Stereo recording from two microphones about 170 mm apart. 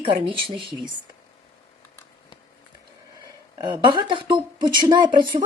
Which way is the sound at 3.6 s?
25° right (ahead or behind).